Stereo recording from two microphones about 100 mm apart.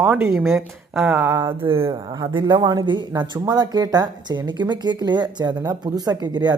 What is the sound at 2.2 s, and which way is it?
Speech, 50° right (ahead or behind).